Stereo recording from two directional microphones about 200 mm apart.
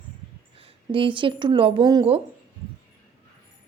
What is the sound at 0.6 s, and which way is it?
A woman's voice, 25° right (ahead or behind).